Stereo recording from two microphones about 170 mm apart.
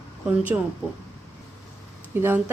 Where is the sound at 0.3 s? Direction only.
10° right (ahead or behind).